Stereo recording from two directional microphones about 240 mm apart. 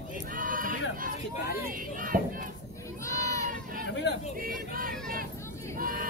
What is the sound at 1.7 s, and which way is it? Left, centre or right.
Battle cry, right.